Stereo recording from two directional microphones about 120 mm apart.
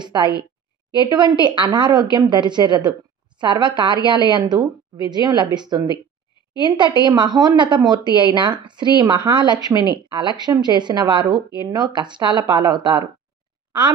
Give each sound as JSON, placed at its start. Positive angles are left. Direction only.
{"t": 0.0, "sound": "a woman's voice", "side_deg": -40}
{"t": 7.1, "sound": "speech", "side_deg": -35}